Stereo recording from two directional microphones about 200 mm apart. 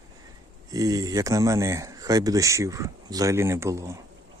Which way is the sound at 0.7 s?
20° right (ahead or behind).